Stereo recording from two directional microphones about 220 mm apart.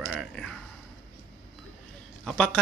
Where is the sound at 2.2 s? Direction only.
5° left (ahead or behind).